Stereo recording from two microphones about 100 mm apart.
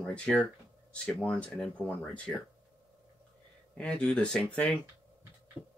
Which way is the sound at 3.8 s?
10° left (ahead or behind).